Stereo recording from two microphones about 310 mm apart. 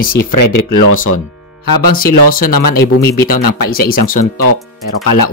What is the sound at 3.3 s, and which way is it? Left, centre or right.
Speech, left.